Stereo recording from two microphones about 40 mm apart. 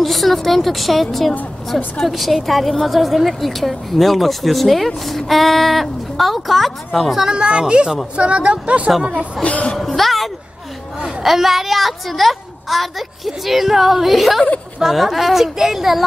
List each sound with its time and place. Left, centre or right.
0.0 s a woman's voice: centre
7.2 s speech: right
9.4 s a woman's voice: left
9.8 s a woman's voice: centre